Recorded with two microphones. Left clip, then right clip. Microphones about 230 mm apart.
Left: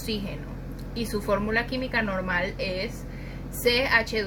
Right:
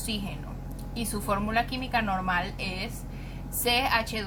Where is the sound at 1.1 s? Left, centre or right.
Right.